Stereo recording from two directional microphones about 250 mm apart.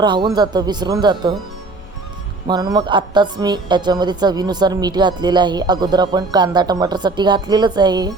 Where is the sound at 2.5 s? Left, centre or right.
Centre.